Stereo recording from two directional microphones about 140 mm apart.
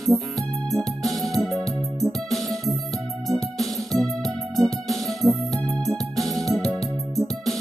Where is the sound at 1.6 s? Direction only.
25° right (ahead or behind).